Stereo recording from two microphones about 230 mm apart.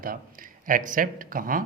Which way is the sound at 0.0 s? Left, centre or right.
Right.